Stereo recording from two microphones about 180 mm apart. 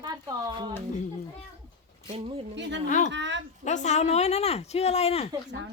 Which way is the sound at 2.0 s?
30° right (ahead or behind).